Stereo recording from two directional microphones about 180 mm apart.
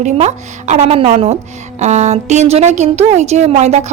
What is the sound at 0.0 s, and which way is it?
A woman's voice, 40° right (ahead or behind).